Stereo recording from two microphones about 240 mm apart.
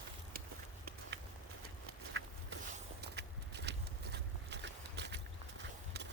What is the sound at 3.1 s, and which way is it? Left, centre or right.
Horse, right.